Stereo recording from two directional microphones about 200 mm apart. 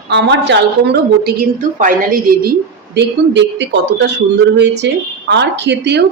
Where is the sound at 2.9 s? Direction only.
60° right (ahead or behind).